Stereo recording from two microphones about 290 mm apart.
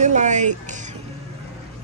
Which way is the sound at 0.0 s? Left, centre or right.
Right.